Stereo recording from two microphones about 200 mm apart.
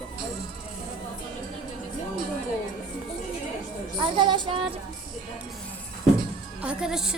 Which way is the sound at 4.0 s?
25° right (ahead or behind).